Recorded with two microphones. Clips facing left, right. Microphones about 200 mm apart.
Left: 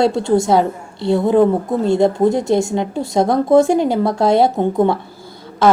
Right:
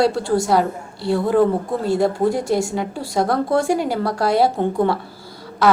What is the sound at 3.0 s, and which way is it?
A woman's voice, 20° left (ahead or behind).